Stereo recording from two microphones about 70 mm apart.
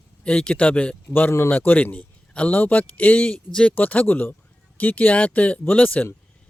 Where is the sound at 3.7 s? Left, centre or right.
Left.